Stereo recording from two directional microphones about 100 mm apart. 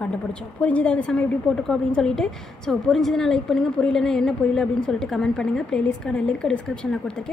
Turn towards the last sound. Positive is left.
turn(degrees=5)  # may be behind; listen again after turning